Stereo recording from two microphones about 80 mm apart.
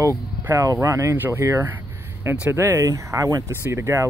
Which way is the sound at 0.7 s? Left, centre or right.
Right.